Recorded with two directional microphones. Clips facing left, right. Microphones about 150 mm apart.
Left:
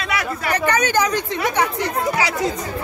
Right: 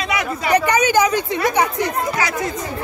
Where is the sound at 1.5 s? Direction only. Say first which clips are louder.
Right 2 dB; 15° right (ahead or behind).